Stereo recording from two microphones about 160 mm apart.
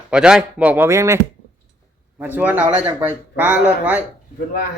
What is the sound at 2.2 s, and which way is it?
Speech, 10° right (ahead or behind).